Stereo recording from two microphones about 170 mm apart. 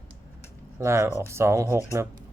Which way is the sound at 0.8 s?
15° right (ahead or behind).